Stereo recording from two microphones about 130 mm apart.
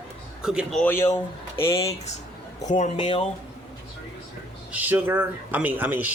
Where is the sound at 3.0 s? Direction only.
45° left (ahead or behind).